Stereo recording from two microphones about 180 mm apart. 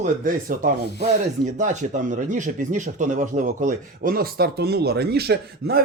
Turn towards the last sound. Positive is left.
turn(degrees=-60)  # may be behind; listen again after turning